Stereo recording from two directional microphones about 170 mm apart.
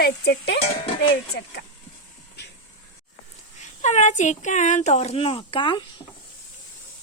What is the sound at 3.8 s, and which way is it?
Speech, 45° left (ahead or behind).